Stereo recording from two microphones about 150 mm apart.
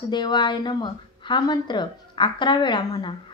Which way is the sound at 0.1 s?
30° left (ahead or behind).